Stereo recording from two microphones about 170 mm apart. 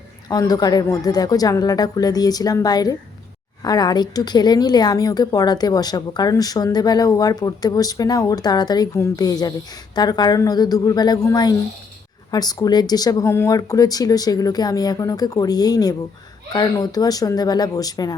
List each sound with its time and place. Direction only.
0.3 s a woman's voice: 20° left (ahead or behind)